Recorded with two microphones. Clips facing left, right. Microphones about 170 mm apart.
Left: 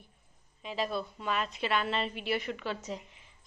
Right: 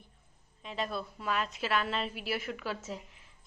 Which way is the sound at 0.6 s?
Centre (ahead or behind).